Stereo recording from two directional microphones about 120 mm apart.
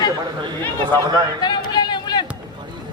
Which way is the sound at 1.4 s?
35° left (ahead or behind).